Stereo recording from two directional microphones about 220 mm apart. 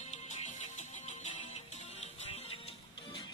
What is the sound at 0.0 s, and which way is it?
Music, 30° left (ahead or behind).